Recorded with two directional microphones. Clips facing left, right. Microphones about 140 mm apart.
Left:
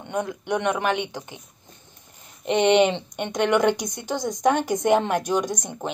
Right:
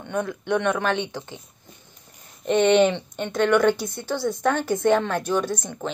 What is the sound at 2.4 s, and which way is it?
A woman's voice, 15° left (ahead or behind).